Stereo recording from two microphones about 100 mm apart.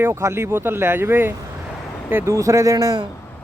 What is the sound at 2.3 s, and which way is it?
Speech, 30° right (ahead or behind).